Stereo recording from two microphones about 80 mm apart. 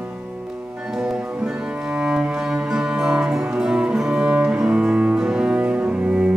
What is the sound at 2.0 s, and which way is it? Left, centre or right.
Cello, centre.